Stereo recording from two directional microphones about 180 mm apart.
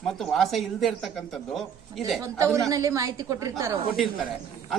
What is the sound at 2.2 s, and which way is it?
A woman's voice, 15° right (ahead or behind).